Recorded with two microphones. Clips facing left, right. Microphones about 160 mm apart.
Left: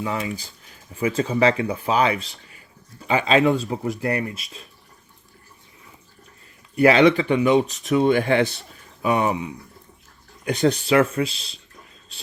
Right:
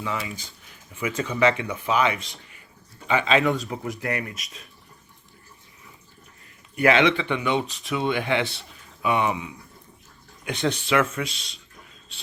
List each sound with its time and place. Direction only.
0.0 s speech: 35° left (ahead or behind)
6.7 s speech: 35° left (ahead or behind)